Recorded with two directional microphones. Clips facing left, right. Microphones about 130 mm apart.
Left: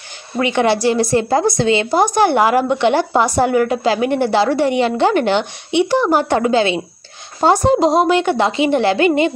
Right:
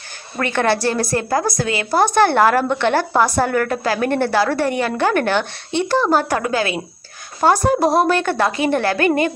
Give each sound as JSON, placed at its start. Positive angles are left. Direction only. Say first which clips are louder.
{"t": 0.4, "sound": "a woman's voice", "louder": "left 3 dB", "side_deg": 15}